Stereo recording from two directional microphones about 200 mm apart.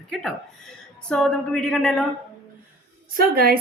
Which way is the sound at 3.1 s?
50° right (ahead or behind).